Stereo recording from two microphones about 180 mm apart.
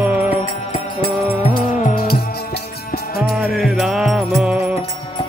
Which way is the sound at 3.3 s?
Centre (ahead or behind).